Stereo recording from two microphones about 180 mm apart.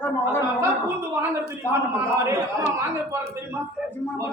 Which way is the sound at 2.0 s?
15° right (ahead or behind).